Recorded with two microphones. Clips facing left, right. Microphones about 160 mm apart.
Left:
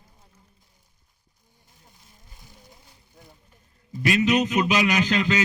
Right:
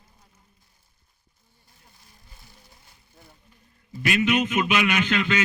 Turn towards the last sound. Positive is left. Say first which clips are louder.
# left 1 dB
turn(degrees=35)  # may be behind; listen again after turning